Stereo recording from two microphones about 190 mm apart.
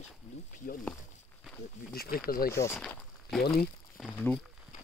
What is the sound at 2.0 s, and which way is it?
Speech, 50° left (ahead or behind).